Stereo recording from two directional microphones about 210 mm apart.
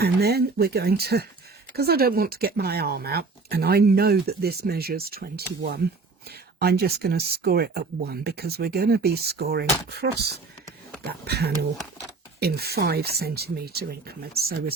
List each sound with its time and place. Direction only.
0.0 s speech: 50° right (ahead or behind)